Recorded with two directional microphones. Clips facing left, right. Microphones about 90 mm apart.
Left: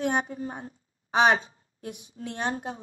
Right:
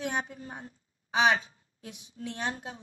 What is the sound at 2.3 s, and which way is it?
Speech, 55° left (ahead or behind).